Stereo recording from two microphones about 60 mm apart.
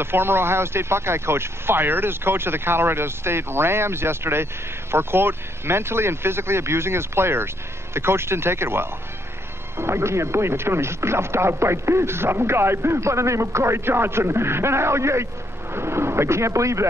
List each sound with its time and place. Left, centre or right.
0.0 s speech: right